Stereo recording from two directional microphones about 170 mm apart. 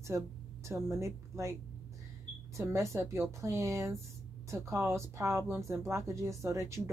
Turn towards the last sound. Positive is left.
turn(degrees=-15)  # may be behind; listen again after turning